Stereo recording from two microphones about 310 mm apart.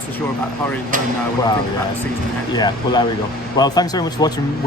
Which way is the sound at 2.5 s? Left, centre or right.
Centre.